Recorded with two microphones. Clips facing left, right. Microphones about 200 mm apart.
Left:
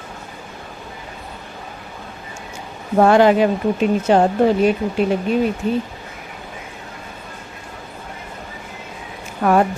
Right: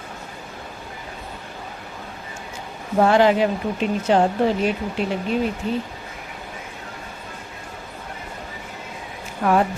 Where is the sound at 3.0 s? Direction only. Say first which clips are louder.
Left 4 dB; 50° left (ahead or behind).